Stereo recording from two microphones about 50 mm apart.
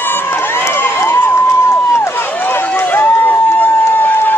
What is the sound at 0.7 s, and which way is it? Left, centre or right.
Crowd, left.